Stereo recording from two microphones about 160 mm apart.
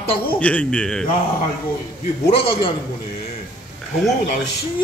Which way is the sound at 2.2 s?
40° left (ahead or behind).